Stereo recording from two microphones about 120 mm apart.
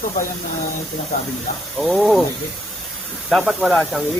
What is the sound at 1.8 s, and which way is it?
Speech, centre (ahead or behind).